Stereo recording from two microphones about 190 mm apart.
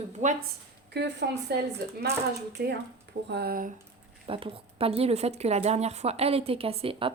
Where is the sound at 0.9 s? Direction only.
65° right (ahead or behind).